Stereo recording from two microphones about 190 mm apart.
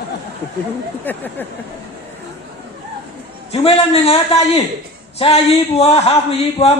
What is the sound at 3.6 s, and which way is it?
Speech, 30° left (ahead or behind).